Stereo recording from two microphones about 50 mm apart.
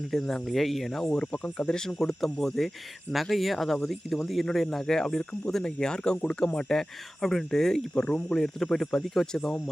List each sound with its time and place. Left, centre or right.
0.1 s speech: centre
1.1 s speech: centre